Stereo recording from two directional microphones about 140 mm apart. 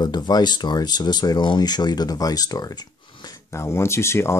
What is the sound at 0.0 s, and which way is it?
Speech, 30° left (ahead or behind).